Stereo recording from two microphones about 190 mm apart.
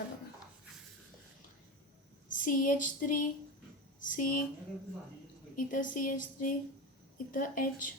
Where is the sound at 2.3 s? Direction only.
45° left (ahead or behind).